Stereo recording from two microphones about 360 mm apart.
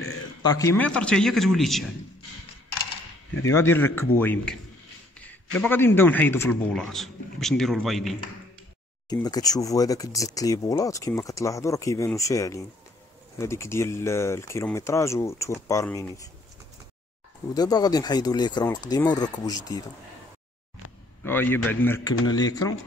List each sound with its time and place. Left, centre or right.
0.4 s a man's voice: centre
3.4 s a man's voice: centre
9.1 s speech: centre
17.6 s speech: centre
21.2 s a man's voice: centre